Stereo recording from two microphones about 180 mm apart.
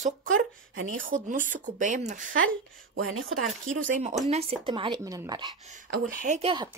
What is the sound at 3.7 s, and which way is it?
Speech, 45° right (ahead or behind).